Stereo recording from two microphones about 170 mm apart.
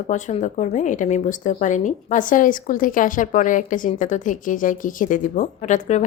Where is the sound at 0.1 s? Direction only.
45° left (ahead or behind).